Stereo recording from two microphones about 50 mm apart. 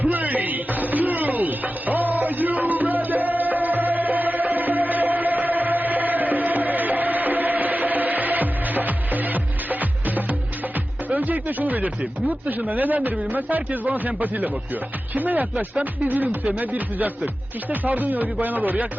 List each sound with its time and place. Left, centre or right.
0.0 s music: right
11.1 s music: right
12.3 s speech: right